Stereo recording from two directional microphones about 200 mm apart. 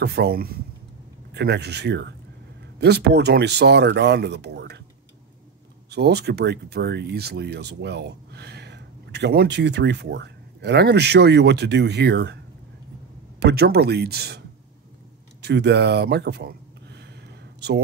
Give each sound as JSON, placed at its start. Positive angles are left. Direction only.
{"t": 0.0, "sound": "speech", "side_deg": -55}
{"t": 5.9, "sound": "speech", "side_deg": -55}
{"t": 13.4, "sound": "speech", "side_deg": -55}
{"t": 15.4, "sound": "a sound", "side_deg": -55}